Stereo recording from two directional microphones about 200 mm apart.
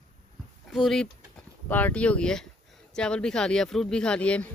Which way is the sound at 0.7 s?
Centre (ahead or behind).